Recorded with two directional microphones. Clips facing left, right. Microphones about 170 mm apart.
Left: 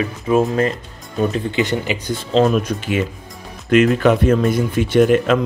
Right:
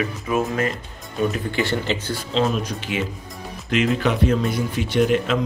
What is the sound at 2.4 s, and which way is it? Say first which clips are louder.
Speech: left 6 dB; 55° left (ahead or behind).